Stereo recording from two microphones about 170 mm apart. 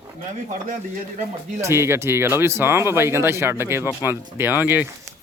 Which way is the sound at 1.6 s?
15° right (ahead or behind).